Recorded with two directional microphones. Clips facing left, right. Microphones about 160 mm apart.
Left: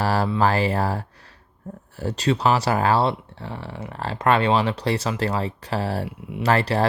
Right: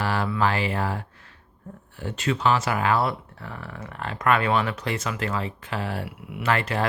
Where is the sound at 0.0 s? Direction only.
35° left (ahead or behind).